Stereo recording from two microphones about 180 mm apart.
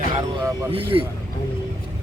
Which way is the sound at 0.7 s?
30° right (ahead or behind).